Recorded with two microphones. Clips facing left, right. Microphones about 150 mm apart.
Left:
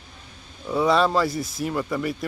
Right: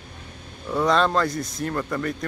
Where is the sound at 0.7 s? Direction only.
5° left (ahead or behind).